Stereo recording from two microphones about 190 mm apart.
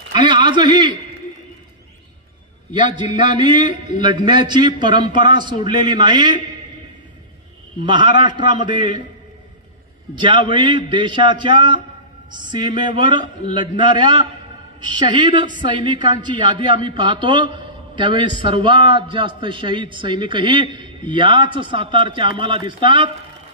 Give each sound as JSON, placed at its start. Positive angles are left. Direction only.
{"t": 0.1, "sound": "a man's voice", "side_deg": -25}
{"t": 2.7, "sound": "a man's voice", "side_deg": -25}
{"t": 7.8, "sound": "a man's voice", "side_deg": -25}
{"t": 10.2, "sound": "a man's voice", "side_deg": -25}